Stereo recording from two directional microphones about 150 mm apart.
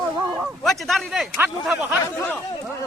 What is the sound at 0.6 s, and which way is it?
A man's voice, centre (ahead or behind).